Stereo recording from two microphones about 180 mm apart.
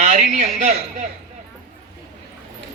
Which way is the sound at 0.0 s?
40° right (ahead or behind).